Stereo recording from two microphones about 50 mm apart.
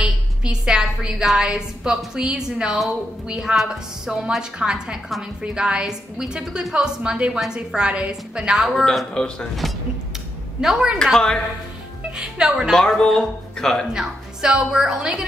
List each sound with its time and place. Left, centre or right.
0.0 s a woman's voice: centre
8.8 s speech: centre
10.6 s a woman's voice: centre
11.1 s speech: centre
12.2 s a woman's voice: centre
12.7 s speech: centre
13.9 s a woman's voice: centre